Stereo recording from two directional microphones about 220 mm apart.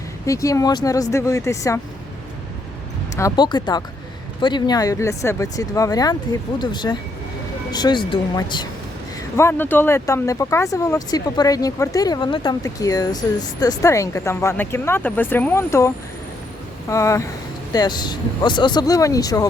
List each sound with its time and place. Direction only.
0.3 s speech: 15° left (ahead or behind)
3.2 s speech: 15° left (ahead or behind)
16.9 s speech: 15° left (ahead or behind)